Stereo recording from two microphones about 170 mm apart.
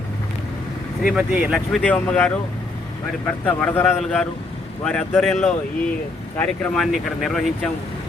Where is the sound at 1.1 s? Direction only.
5° right (ahead or behind).